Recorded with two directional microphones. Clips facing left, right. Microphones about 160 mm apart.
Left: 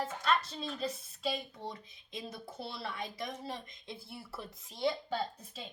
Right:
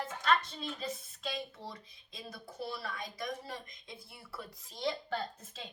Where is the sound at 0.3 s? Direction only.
5° left (ahead or behind); by 3.9 s 25° left (ahead or behind).